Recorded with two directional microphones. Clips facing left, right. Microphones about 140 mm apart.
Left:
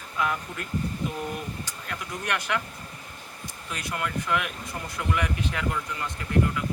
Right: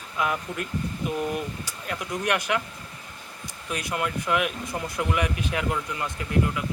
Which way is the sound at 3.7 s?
15° right (ahead or behind).